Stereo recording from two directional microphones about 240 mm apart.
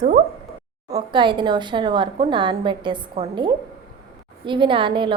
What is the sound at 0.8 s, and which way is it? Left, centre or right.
A woman's voice, centre.